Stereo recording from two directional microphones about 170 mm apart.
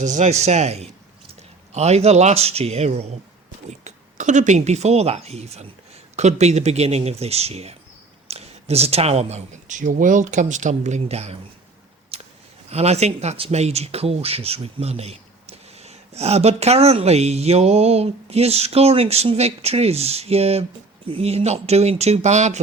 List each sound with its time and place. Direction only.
0.0 s speech: 45° right (ahead or behind)
12.7 s speech: 40° right (ahead or behind)